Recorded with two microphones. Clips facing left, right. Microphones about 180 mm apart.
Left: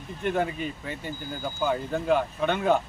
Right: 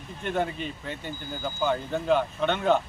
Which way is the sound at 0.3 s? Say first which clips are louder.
Left 2 dB; 10° left (ahead or behind).